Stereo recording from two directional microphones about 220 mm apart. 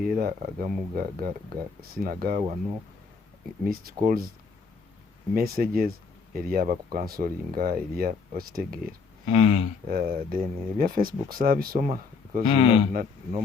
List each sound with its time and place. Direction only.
0.0 s speech: 40° right (ahead or behind)
2.4 s speech: 20° right (ahead or behind)
3.6 s speech: 45° right (ahead or behind)
5.3 s speech: 40° right (ahead or behind)
9.3 s speech: 25° left (ahead or behind)
9.8 s speech: 40° right (ahead or behind)
12.5 s speech: 25° left (ahead or behind)